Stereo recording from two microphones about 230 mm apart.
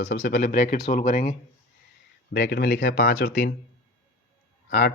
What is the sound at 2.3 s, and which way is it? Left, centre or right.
Speech, left.